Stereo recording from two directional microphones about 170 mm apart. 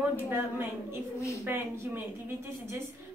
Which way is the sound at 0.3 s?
15° right (ahead or behind).